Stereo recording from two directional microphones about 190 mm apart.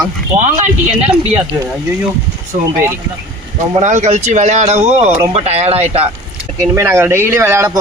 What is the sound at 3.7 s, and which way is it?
Speech, 40° right (ahead or behind).